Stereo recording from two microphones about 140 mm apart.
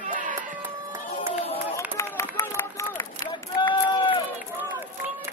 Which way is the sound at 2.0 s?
20° left (ahead or behind).